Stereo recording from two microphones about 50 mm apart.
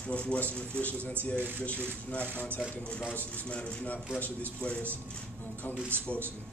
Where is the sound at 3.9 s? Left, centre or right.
Left.